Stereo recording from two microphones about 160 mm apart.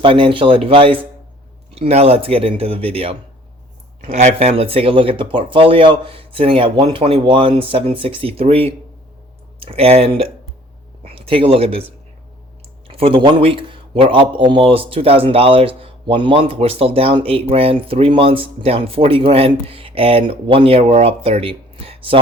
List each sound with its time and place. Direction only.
0.0 s a man's voice: 35° right (ahead or behind)
12.9 s a man's voice: 35° right (ahead or behind)